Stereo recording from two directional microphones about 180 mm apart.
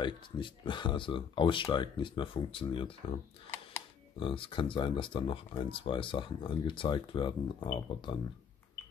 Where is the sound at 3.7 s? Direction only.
15° left (ahead or behind).